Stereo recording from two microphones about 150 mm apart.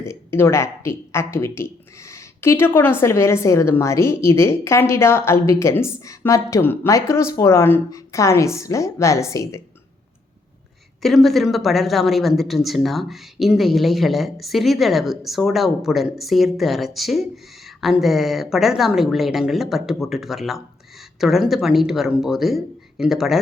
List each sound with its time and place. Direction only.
0.0 s speech: 15° left (ahead or behind)
11.0 s speech: centre (ahead or behind)